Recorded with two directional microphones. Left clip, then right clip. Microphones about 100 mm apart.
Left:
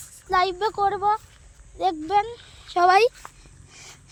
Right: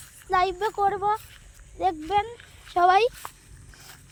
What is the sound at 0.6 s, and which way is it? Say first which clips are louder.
Speech: left 1 dB; 65° left (ahead or behind).